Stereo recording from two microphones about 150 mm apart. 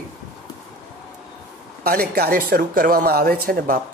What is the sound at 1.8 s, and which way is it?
Speech, 85° right.